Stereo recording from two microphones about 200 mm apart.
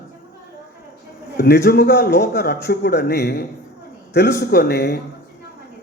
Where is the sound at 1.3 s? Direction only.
55° left (ahead or behind).